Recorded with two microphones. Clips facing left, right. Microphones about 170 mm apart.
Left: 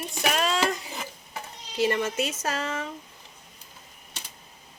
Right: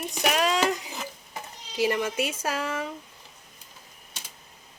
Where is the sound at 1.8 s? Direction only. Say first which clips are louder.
Even; 10° right (ahead or behind).